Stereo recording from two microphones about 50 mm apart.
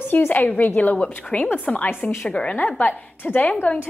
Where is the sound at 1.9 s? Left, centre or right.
Left.